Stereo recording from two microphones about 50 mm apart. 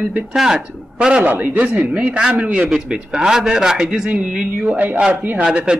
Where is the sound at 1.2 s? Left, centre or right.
Right.